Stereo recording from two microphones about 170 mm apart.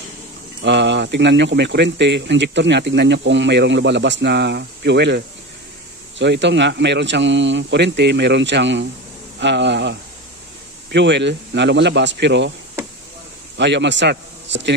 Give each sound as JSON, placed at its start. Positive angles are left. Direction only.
{"t": 0.6, "sound": "speech", "side_deg": -90}
{"t": 13.6, "sound": "a man's voice", "side_deg": -90}